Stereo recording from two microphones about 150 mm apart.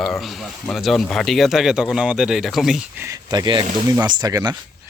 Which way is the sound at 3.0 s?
25° right (ahead or behind).